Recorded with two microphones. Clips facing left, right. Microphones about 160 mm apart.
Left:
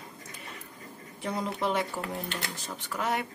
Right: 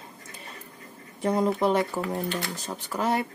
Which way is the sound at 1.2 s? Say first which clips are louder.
Right 9 dB; 45° right (ahead or behind).